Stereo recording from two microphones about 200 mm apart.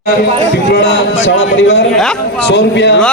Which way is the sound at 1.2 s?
65° left (ahead or behind).